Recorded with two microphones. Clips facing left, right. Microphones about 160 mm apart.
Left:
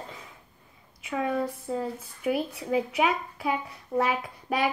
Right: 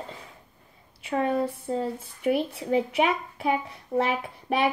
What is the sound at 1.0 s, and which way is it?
Speech, 35° right (ahead or behind).